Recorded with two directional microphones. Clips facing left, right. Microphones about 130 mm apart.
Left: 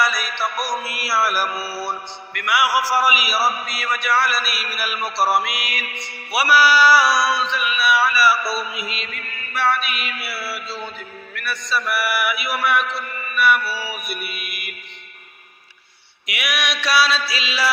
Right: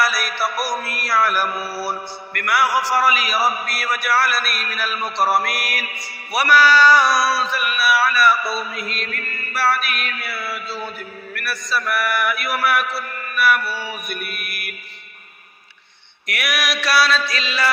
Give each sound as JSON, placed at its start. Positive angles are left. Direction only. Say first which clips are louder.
{"t": 0.0, "sound": "music", "louder": "right 1 dB", "side_deg": -5}
{"t": 6.3, "sound": "music", "louder": "right 1 dB", "side_deg": 10}
{"t": 16.2, "sound": "music", "louder": "right 1 dB", "side_deg": 0}